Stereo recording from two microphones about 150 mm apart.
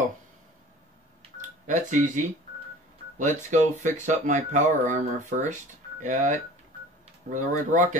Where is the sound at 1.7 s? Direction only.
55° right (ahead or behind).